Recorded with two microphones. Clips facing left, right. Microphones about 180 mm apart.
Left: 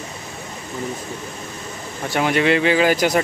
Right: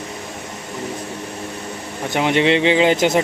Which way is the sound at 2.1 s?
20° right (ahead or behind).